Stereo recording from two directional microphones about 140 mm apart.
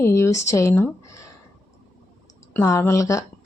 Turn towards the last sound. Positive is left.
turn(degrees=20)  # may be behind; listen again after turning